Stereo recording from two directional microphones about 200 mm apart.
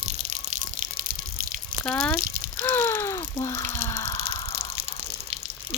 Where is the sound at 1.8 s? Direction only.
5° left (ahead or behind).